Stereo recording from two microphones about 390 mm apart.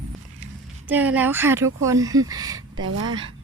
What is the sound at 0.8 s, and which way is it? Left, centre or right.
Speech, centre.